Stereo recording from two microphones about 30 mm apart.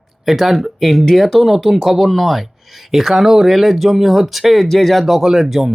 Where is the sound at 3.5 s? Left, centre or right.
Centre.